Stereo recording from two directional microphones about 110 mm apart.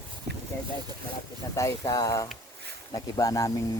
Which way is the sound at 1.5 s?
30° left (ahead or behind).